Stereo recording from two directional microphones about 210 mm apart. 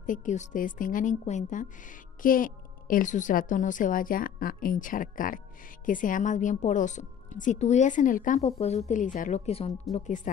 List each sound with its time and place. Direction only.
0.0 s a woman's voice: 40° left (ahead or behind)